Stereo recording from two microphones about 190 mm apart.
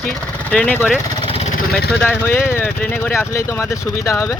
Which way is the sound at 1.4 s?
50° left (ahead or behind).